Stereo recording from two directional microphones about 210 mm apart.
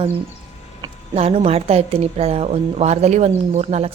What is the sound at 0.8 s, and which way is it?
A woman's voice, 30° right (ahead or behind).